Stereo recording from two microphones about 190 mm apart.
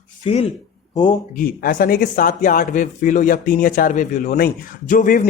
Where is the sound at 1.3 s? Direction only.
50° left (ahead or behind).